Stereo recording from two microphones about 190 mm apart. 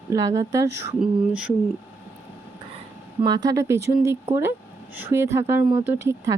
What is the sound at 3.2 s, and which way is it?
Speech, 20° right (ahead or behind).